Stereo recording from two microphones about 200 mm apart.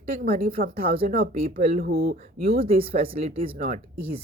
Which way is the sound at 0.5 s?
50° right (ahead or behind).